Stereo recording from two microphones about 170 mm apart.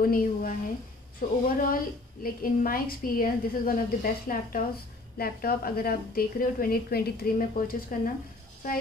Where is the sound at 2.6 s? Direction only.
55° left (ahead or behind).